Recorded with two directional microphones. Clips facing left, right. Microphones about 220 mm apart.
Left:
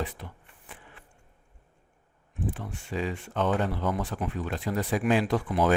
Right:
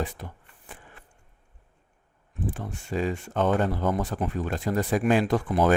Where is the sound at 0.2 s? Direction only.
45° right (ahead or behind).